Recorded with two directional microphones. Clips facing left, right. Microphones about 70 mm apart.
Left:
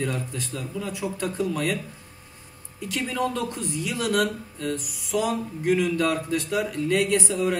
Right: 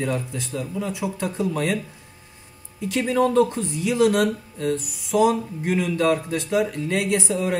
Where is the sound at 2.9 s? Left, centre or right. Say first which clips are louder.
Right 8 dB; right.